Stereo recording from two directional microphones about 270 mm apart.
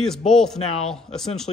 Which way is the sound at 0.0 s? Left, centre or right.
Centre.